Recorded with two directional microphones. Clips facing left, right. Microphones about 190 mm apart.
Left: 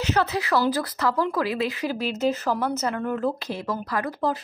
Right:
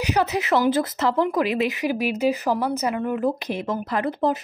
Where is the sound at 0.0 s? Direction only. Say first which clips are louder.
Right 2 dB; 15° right (ahead or behind).